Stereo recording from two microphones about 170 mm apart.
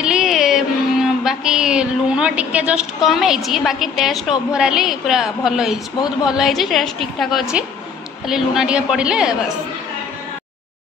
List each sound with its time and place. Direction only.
0.0 s music: 5° right (ahead or behind)
1.2 s a woman's voice: 5° right (ahead or behind)